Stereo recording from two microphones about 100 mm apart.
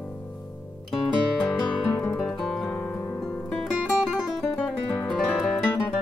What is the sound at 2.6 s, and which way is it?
Music, 20° left (ahead or behind).